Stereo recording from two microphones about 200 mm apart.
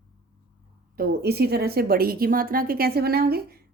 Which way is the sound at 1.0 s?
50° right (ahead or behind).